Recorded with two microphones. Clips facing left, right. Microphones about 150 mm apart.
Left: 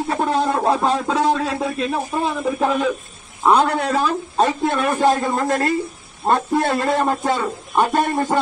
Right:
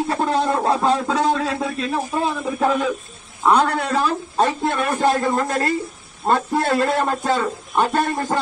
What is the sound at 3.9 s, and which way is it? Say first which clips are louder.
A man's voice: right 1 dB; 15° left (ahead or behind).